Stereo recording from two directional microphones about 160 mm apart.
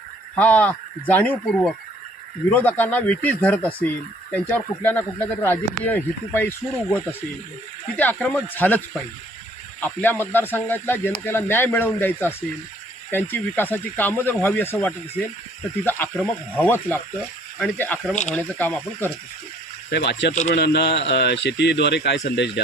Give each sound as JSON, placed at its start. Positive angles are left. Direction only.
{"t": 0.3, "sound": "speech", "side_deg": 10}
{"t": 7.9, "sound": "speech", "side_deg": 10}
{"t": 9.8, "sound": "speech", "side_deg": 10}
{"t": 18.1, "sound": "speech", "side_deg": 45}
{"t": 18.3, "sound": "speech", "side_deg": 10}
{"t": 19.9, "sound": "speech", "side_deg": 90}